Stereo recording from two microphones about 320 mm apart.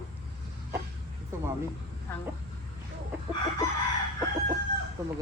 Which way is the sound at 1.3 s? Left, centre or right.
Centre.